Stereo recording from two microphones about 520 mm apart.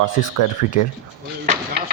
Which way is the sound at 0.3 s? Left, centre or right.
Left.